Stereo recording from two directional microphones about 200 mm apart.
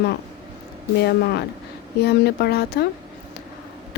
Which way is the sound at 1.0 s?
55° left (ahead or behind).